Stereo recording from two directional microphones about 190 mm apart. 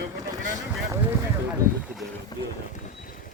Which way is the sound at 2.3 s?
20° left (ahead or behind).